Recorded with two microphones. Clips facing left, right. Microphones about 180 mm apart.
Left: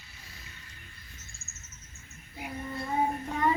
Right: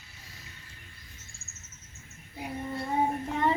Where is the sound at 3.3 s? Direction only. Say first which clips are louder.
Even; 25° right (ahead or behind).